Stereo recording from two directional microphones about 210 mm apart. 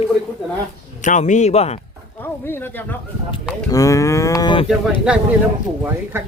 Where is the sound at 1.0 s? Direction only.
35° left (ahead or behind).